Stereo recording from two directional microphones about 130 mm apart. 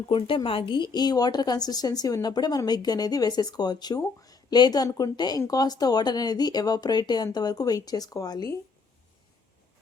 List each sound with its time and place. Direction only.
0.1 s a woman's voice: 40° left (ahead or behind)